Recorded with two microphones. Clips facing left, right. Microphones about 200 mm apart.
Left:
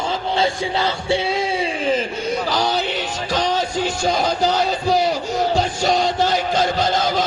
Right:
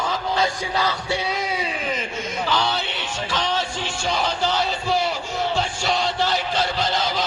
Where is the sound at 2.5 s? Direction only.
40° left (ahead or behind).